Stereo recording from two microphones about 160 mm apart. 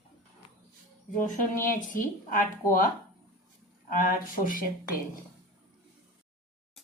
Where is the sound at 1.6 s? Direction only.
55° left (ahead or behind).